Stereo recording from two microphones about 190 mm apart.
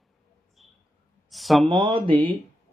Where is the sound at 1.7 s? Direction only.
25° right (ahead or behind).